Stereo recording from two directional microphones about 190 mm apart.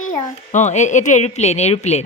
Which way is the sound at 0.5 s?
40° left (ahead or behind).